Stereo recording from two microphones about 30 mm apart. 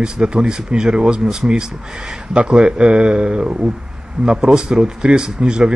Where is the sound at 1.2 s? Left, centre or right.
Centre.